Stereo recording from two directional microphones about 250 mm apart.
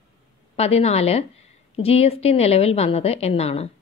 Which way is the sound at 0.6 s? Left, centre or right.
Left.